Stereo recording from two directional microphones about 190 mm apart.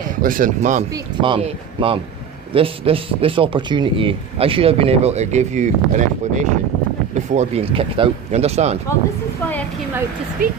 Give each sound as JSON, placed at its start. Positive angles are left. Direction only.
{"t": 0.2, "sound": "speech", "side_deg": -45}
{"t": 10.4, "sound": "speech", "side_deg": -45}